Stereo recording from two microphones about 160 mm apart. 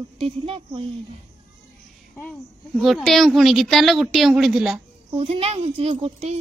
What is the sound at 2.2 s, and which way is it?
A woman's voice, 5° left (ahead or behind).